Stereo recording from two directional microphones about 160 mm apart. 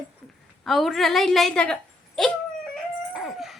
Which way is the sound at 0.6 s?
Centre (ahead or behind).